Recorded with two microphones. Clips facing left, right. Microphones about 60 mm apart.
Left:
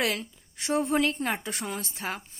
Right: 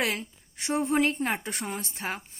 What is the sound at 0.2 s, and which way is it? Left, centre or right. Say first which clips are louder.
A woman's voice: even; right.